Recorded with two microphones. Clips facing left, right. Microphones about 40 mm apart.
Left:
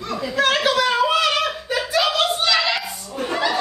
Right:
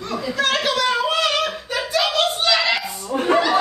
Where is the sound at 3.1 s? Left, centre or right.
Right.